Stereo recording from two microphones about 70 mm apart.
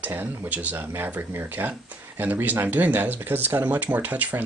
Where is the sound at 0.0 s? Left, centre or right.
Right.